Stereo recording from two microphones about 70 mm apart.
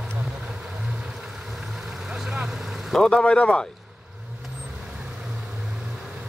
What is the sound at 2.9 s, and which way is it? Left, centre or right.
Speech, centre.